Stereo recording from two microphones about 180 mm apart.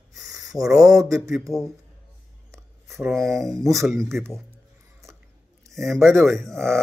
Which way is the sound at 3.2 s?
15° right (ahead or behind).